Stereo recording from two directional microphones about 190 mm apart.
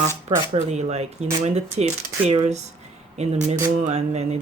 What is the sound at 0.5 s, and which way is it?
Speech, 35° right (ahead or behind).